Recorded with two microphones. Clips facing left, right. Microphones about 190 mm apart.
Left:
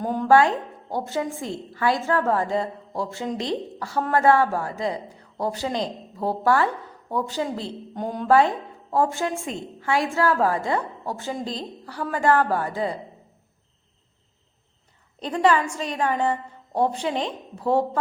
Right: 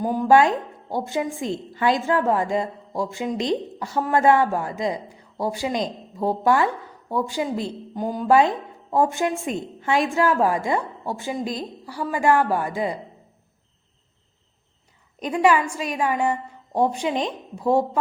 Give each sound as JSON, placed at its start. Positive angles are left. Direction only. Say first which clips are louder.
{"t": 0.0, "sound": "speech", "louder": "right 2 dB", "side_deg": -5}
{"t": 0.3, "sound": "a woman's voice", "louder": "right 1 dB", "side_deg": -15}
{"t": 7.9, "sound": "speech", "louder": "right 2 dB", "side_deg": 0}
{"t": 8.3, "sound": "a woman's voice", "louder": "right 1 dB", "side_deg": -15}
{"t": 15.2, "sound": "a woman's voice", "louder": "right 1 dB", "side_deg": -10}